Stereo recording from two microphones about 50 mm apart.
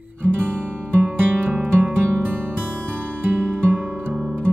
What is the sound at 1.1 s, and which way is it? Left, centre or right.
Music, right.